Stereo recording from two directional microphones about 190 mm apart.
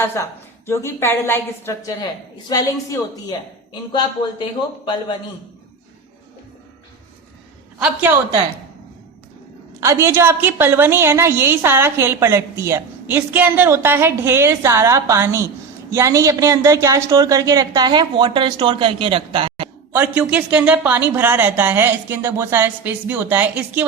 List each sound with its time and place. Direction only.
0.0 s a woman's voice: 15° left (ahead or behind)
7.8 s a woman's voice: 5° right (ahead or behind)
9.8 s a woman's voice: 15° right (ahead or behind)
20.0 s a woman's voice: 5° right (ahead or behind)